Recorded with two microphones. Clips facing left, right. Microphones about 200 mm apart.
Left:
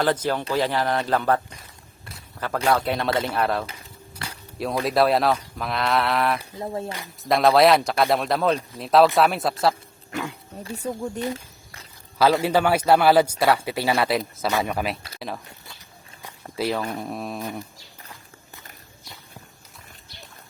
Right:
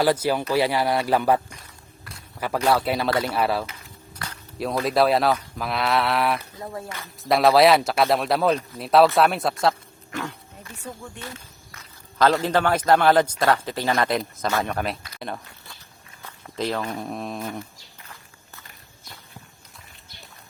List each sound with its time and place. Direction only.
0.0 s speech: 10° right (ahead or behind)
2.6 s a man's voice: 5° right (ahead or behind)
6.6 s speech: 25° left (ahead or behind)
7.2 s a man's voice: centre (ahead or behind)
10.6 s speech: 35° left (ahead or behind)
11.3 s insect: 30° left (ahead or behind)
12.1 s a man's voice: 5° left (ahead or behind)
16.6 s a man's voice: 10° left (ahead or behind)